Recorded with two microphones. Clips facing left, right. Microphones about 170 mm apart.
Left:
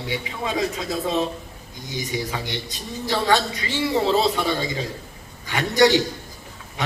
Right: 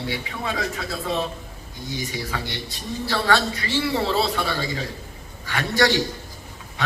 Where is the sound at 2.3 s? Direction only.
20° left (ahead or behind).